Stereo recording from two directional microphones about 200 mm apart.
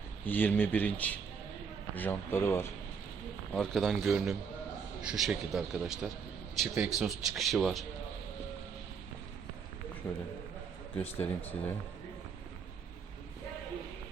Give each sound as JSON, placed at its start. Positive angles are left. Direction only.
{"t": 0.3, "sound": "a man's voice", "side_deg": 10}
{"t": 10.0, "sound": "a man's voice", "side_deg": 25}
{"t": 11.0, "sound": "speech", "side_deg": 10}